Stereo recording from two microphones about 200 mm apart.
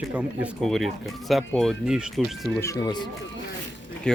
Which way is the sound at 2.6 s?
15° left (ahead or behind).